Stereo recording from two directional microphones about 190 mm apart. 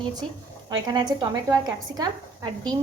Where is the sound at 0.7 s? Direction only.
20° right (ahead or behind).